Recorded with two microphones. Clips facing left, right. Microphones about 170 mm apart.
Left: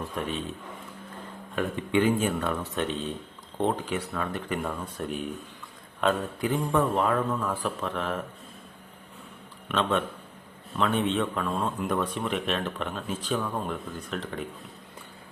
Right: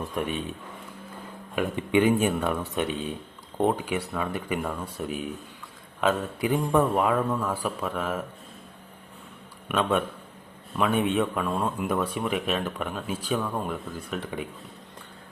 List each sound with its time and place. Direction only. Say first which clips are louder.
0.0 s speech: right 2 dB; 15° right (ahead or behind)
1.5 s a man's voice: right 2 dB; 15° right (ahead or behind)
6.5 s speech: right 3 dB; 15° right (ahead or behind)
9.6 s speech: right 2 dB; 10° right (ahead or behind)